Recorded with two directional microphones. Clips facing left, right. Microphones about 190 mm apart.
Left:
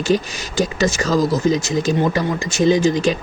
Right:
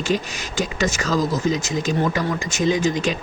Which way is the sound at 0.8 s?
35° left (ahead or behind).